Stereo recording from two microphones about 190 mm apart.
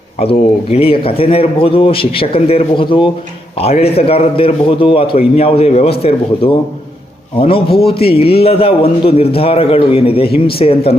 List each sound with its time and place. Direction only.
0.2 s a man's voice: 30° left (ahead or behind)